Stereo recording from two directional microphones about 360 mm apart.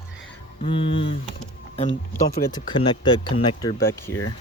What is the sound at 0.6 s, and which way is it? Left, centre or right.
Speech, centre.